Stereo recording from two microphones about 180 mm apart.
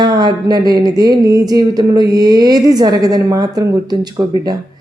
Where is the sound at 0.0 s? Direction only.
25° right (ahead or behind).